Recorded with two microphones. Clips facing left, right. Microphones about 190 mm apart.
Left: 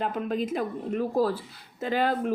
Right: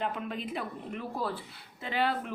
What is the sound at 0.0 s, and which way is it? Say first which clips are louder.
Speech: left 6 dB; 40° left (ahead or behind).